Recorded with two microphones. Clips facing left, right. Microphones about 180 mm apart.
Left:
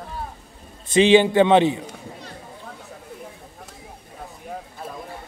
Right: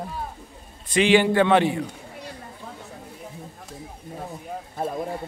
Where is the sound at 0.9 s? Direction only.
25° left (ahead or behind).